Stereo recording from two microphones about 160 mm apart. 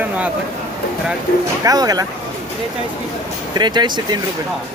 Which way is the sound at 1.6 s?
25° right (ahead or behind).